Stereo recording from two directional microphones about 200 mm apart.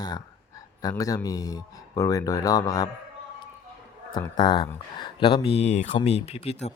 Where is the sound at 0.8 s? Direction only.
15° left (ahead or behind).